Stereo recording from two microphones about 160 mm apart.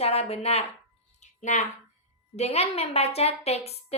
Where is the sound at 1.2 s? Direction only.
45° left (ahead or behind).